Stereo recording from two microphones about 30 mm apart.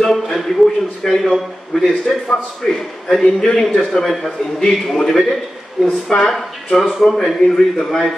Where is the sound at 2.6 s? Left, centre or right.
Left.